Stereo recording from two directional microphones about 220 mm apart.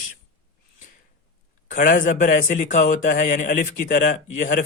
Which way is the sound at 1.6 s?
35° left (ahead or behind).